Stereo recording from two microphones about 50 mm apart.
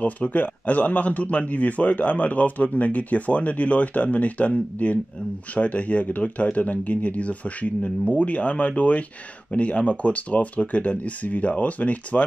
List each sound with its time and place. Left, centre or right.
0.0 s speech: left